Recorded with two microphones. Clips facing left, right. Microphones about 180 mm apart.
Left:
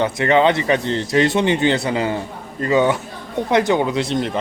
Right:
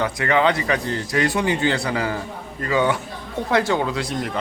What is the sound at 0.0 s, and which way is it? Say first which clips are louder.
A man's voice: left 4 dB; 25° left (ahead or behind).